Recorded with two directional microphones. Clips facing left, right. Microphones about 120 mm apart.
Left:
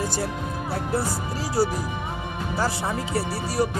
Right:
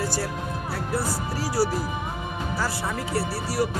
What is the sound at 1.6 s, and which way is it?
Speech, 20° left (ahead or behind).